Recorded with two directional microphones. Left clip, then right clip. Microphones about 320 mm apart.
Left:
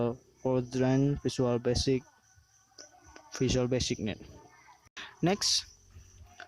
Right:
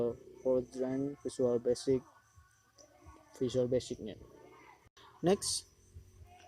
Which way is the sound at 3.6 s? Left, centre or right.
Left.